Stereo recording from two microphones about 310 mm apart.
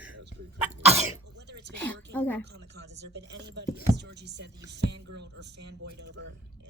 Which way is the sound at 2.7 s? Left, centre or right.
Right.